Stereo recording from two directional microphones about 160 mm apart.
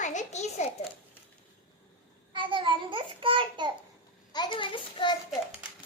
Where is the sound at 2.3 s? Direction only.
30° right (ahead or behind).